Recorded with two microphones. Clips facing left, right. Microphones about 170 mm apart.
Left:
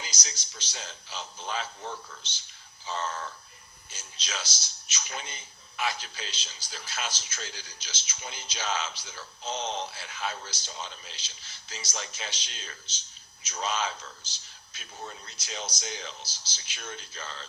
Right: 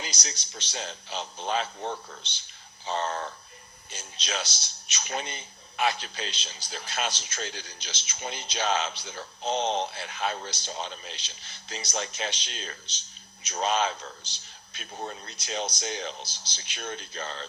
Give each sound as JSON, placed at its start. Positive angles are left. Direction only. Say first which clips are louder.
{"t": 0.0, "sound": "a man's voice", "louder": "right 4 dB", "side_deg": -60}